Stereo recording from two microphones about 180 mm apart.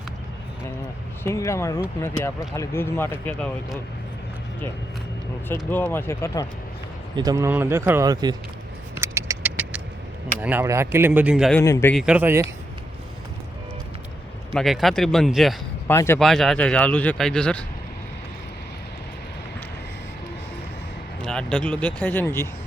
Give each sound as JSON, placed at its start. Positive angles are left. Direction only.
{"t": 1.2, "sound": "speech", "side_deg": 15}
{"t": 5.7, "sound": "speech", "side_deg": 10}
{"t": 7.2, "sound": "speech", "side_deg": -20}
{"t": 9.0, "sound": "a sound", "side_deg": -15}
{"t": 10.4, "sound": "speech", "side_deg": -15}
{"t": 11.5, "sound": "speech", "side_deg": 15}
{"t": 11.9, "sound": "speech", "side_deg": -5}
{"t": 14.5, "sound": "speech", "side_deg": 0}
{"t": 15.9, "sound": "speech", "side_deg": 15}
{"t": 16.2, "sound": "speech", "side_deg": 0}
{"t": 21.2, "sound": "speech", "side_deg": 5}